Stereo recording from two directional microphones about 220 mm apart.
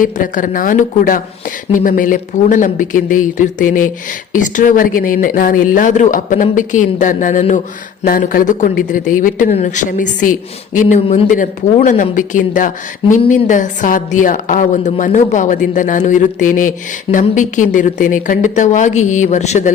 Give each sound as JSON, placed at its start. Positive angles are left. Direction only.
{"t": 0.0, "sound": "speech", "side_deg": 35}